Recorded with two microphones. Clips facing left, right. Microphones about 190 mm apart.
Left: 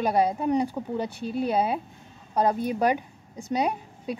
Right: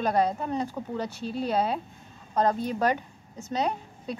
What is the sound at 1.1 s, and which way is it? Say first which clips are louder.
Speech: left 3 dB; 55° left (ahead or behind).